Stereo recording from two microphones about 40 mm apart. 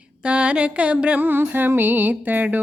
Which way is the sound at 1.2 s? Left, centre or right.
Right.